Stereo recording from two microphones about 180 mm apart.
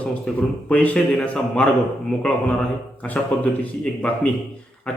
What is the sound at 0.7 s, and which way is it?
A man's voice, 5° left (ahead or behind).